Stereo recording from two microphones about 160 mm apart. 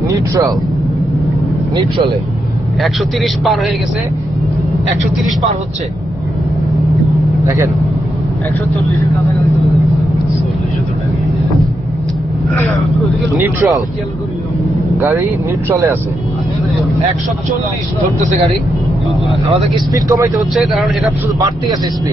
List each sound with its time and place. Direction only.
2.8 s speech: centre (ahead or behind)
7.4 s speech: 15° right (ahead or behind)
13.4 s speech: 20° right (ahead or behind)
15.0 s speech: 15° right (ahead or behind)
19.9 s speech: 20° right (ahead or behind)
20.3 s speech: centre (ahead or behind)